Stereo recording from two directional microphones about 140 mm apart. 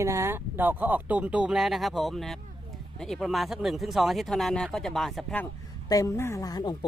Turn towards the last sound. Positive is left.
turn(degrees=30)  # may be behind; listen again after turning